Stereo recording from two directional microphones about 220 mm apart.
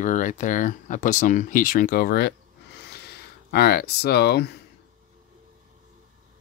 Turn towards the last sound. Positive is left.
turn(degrees=45)  # may be behind; listen again after turning